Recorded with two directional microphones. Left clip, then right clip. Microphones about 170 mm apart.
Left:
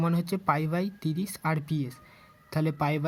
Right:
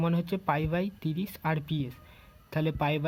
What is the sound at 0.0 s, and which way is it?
Speech, 5° left (ahead or behind).